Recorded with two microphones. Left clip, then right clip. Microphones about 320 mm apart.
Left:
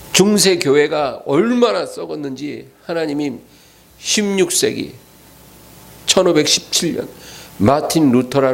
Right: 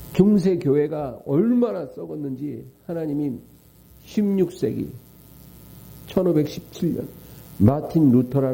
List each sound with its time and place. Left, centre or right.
0.1 s a sound: centre
0.4 s speech: centre
6.1 s speech: centre